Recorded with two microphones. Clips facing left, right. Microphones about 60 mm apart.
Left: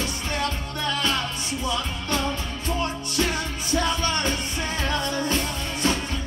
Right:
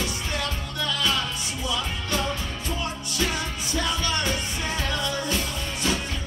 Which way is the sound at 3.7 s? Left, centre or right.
Left.